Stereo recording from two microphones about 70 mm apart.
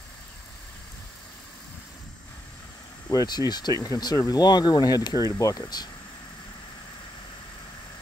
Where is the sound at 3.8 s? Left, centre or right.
Left.